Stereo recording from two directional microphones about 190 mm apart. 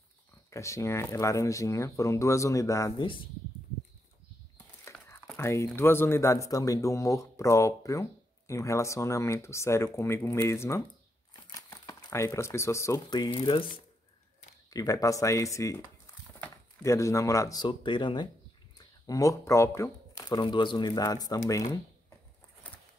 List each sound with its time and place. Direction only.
0.5 s speech: 15° left (ahead or behind)
4.8 s crumpling: 15° left (ahead or behind)
5.3 s speech: 15° left (ahead or behind)